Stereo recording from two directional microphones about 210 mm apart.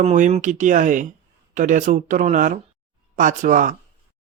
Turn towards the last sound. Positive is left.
turn(degrees=-40)  # may be behind; listen again after turning